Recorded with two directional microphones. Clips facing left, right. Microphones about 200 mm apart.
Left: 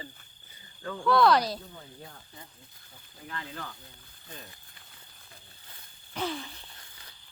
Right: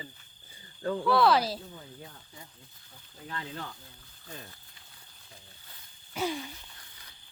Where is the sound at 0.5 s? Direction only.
35° right (ahead or behind).